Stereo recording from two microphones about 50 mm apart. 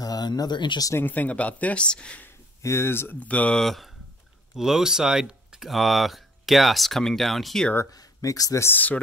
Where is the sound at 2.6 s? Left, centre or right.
Left.